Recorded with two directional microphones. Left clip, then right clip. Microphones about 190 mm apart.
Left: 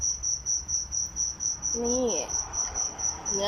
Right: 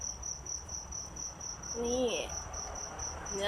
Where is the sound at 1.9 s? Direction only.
30° left (ahead or behind).